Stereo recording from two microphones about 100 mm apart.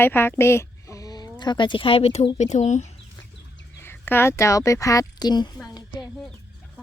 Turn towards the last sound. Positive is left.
turn(degrees=45)  # may be behind; listen again after turning